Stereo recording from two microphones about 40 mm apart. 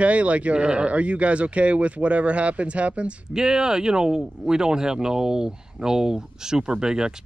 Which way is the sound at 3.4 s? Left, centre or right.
Centre.